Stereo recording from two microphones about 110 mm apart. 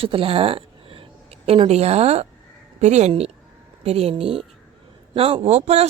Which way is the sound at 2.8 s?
90° right.